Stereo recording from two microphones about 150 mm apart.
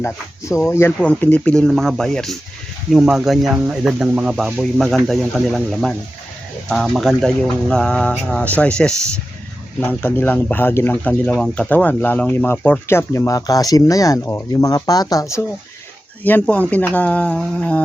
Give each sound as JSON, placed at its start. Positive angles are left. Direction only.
{"t": 0.0, "sound": "speech", "side_deg": 20}
{"t": 16.2, "sound": "speech", "side_deg": 10}